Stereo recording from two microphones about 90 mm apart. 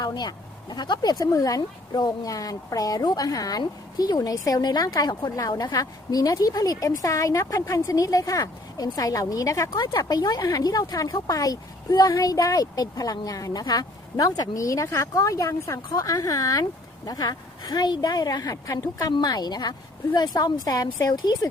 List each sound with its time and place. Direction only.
0.0 s a woman's voice: 50° left (ahead or behind)